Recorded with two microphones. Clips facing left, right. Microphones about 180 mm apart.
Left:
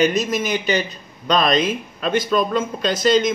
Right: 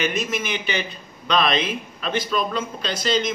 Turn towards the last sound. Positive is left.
turn(degrees=45)  # may be behind; listen again after turning